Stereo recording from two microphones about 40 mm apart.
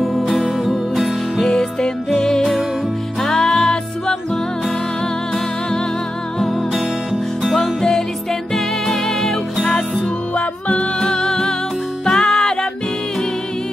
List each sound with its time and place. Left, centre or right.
0.3 s music: centre
1.4 s music: centre
7.5 s music: centre
10.3 s music: left